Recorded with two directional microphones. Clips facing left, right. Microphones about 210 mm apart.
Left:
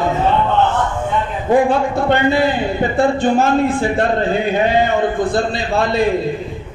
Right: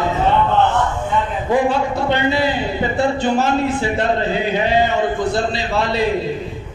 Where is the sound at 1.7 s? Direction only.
50° left (ahead or behind).